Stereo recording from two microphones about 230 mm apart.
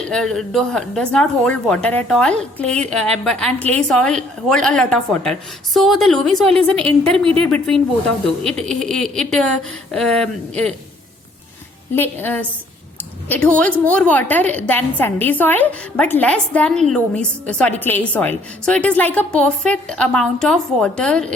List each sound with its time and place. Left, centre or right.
0.0 s a woman's voice: centre
11.9 s a woman's voice: centre